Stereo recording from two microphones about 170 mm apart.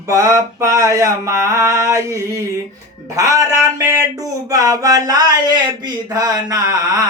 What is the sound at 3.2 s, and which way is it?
Speech, 20° right (ahead or behind).